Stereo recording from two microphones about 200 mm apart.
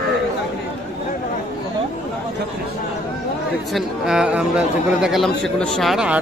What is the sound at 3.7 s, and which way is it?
Speech, 5° right (ahead or behind).